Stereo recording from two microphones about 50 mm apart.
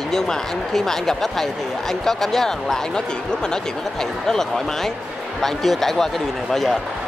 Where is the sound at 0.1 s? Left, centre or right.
Centre.